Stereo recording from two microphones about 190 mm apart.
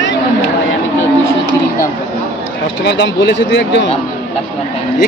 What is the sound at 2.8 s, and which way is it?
Speech, 65° left (ahead or behind).